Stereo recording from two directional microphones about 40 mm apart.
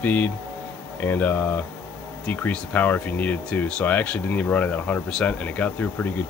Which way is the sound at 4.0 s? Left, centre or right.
Left.